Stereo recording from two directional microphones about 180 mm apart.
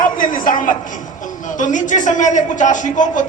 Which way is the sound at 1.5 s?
45° left (ahead or behind).